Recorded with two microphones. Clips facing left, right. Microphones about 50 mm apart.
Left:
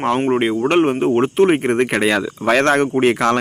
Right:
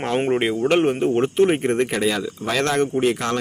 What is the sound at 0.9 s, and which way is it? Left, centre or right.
Speech, left.